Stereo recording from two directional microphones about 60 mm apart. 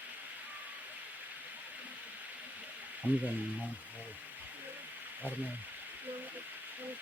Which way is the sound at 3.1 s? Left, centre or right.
Right.